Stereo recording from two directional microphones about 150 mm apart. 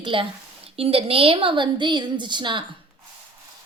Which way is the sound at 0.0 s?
35° right (ahead or behind).